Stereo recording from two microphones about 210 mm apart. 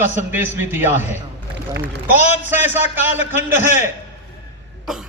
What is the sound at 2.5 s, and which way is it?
Speech, 10° right (ahead or behind).